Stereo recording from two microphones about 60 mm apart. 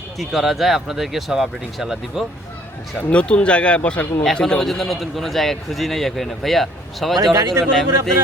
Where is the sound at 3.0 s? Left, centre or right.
Left.